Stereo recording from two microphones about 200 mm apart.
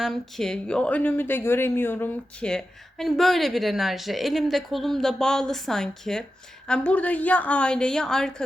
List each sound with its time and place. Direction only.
0.0 s speech: centre (ahead or behind)